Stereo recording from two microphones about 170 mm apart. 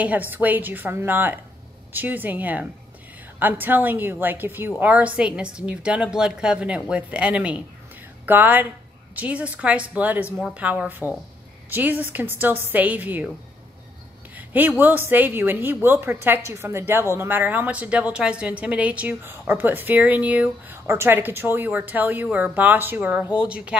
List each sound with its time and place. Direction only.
0.0 s speech: 10° right (ahead or behind)
14.3 s speech: 10° right (ahead or behind)